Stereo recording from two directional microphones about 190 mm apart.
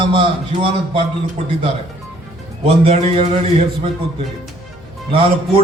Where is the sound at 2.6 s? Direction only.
30° right (ahead or behind).